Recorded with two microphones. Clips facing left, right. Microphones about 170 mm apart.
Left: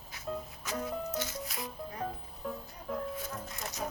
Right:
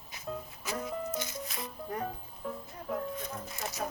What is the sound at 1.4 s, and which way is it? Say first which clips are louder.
Music: right 1 dB; centre (ahead or behind).